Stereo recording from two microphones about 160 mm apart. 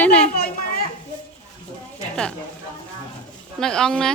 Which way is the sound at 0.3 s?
70° left (ahead or behind).